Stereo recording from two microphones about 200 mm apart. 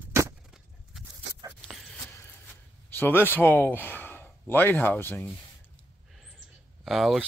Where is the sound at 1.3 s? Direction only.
65° right (ahead or behind).